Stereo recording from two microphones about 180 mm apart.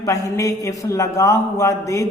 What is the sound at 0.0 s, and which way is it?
A man's voice, 15° left (ahead or behind).